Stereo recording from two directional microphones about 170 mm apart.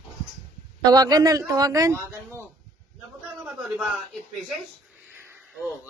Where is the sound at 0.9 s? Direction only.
20° right (ahead or behind).